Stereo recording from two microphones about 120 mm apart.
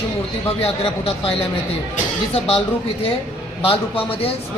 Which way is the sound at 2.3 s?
55° left (ahead or behind).